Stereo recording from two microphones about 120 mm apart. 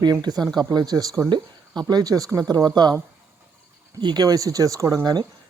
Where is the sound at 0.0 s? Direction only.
35° right (ahead or behind).